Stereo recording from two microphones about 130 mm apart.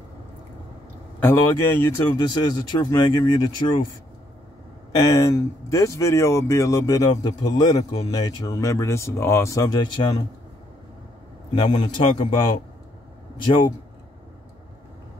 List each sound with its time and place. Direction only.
1.2 s speech: 20° left (ahead or behind)
2.1 s speech: 30° left (ahead or behind)
4.9 s speech: 30° left (ahead or behind)
11.5 s speech: 35° left (ahead or behind)